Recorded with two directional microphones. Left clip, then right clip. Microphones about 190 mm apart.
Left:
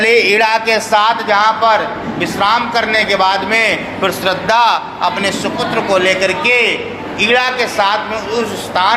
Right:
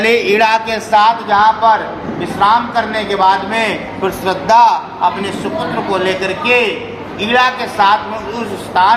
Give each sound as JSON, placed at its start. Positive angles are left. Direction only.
{"t": 0.0, "sound": "a man's voice", "side_deg": 5}